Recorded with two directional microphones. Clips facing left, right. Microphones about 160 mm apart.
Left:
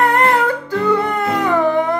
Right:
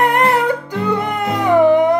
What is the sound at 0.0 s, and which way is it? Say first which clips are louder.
Music: even; 15° right (ahead or behind).